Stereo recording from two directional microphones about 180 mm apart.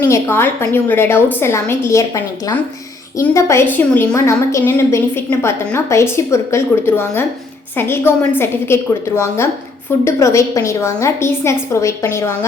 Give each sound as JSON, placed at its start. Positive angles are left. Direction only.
{"t": 0.0, "sound": "a woman's voice", "side_deg": 15}